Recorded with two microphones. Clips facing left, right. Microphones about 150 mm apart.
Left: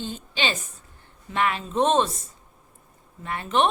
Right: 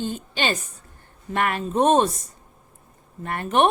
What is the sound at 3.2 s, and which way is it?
Speech, 50° right (ahead or behind).